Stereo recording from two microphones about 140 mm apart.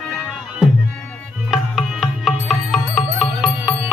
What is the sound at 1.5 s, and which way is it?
Music, centre (ahead or behind).